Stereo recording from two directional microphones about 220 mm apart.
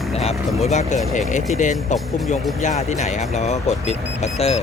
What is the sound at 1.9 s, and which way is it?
Speech, 35° left (ahead or behind).